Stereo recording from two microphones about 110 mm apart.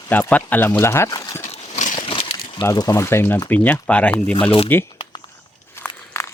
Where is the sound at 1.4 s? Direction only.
90° left.